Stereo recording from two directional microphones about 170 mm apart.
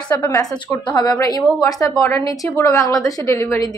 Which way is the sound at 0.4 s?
20° left (ahead or behind).